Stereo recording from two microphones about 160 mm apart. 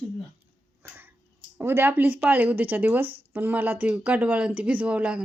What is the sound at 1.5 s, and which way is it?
Speech, 15° right (ahead or behind).